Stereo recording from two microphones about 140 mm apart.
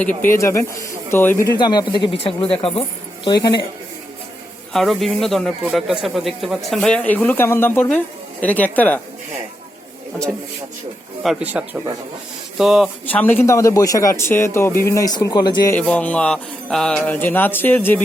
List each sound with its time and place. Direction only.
0.0 s speech: 10° left (ahead or behind)
1.5 s speech: 30° left (ahead or behind)
4.7 s speech: centre (ahead or behind)
11.2 s speech: 5° right (ahead or behind)
13.1 s speech: 15° left (ahead or behind); by 15.7 s 30° left (ahead or behind)
15.7 s speech: 10° left (ahead or behind)